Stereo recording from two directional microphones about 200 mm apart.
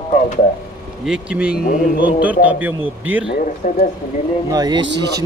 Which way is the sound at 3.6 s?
35° left (ahead or behind).